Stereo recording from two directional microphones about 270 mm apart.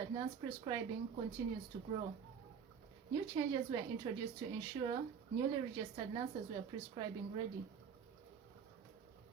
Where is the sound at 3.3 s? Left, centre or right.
Centre.